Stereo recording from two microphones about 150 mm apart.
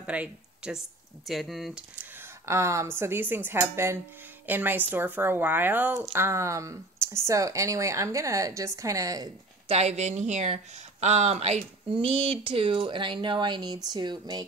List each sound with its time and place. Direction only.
0.0 s speech: 10° right (ahead or behind)
2.0 s speech: 20° right (ahead or behind)
9.7 s speech: 45° right (ahead or behind); by 14.4 s 30° right (ahead or behind)